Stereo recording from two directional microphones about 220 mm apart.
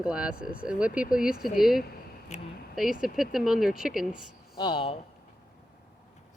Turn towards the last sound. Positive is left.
turn(degrees=25)  # may be behind; listen again after turning